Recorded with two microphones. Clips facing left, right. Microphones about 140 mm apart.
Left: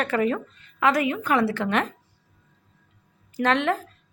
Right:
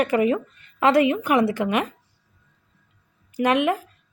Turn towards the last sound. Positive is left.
turn(degrees=-10)  # may be behind; listen again after turning